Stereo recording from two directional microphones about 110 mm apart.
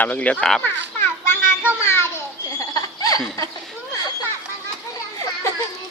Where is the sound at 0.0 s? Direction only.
15° left (ahead or behind).